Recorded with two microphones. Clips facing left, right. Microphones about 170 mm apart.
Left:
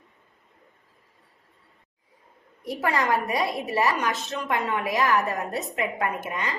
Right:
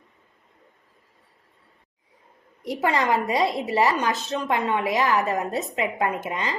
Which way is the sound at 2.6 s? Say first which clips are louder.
Right 2 dB; 20° right (ahead or behind).